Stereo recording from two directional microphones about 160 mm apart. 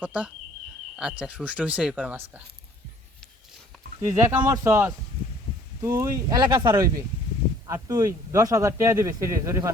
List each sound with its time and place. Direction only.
0.0 s speech: 10° right (ahead or behind)
4.1 s speech: 20° right (ahead or behind)